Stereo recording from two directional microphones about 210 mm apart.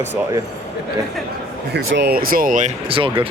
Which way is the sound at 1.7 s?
55° right (ahead or behind).